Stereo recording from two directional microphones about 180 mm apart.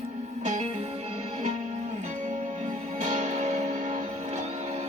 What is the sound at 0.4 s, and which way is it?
Music, 40° right (ahead or behind).